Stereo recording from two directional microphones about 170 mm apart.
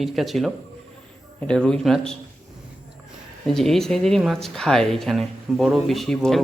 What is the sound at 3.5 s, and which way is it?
Speech, centre (ahead or behind).